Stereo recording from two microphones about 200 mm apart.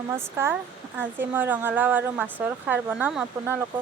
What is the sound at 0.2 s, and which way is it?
Speech, 10° right (ahead or behind).